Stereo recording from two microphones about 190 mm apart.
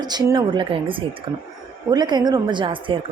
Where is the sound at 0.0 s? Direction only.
20° right (ahead or behind).